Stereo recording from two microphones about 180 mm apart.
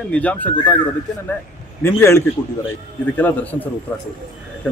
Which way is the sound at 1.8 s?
15° left (ahead or behind).